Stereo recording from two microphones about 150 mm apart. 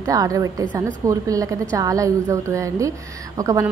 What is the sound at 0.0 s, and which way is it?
A woman's voice, 20° right (ahead or behind).